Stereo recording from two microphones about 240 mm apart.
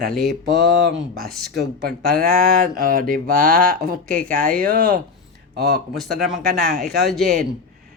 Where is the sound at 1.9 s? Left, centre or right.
Right.